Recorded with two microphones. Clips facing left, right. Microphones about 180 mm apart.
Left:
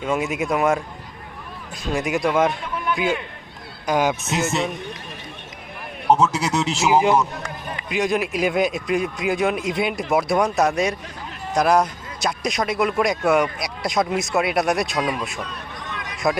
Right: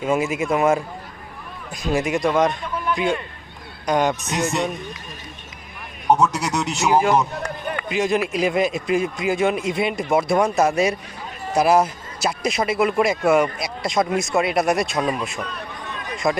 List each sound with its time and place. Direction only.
0.0 s a man's voice: 5° right (ahead or behind)
6.1 s a man's voice: 25° left (ahead or behind)
6.7 s a man's voice: 5° left (ahead or behind)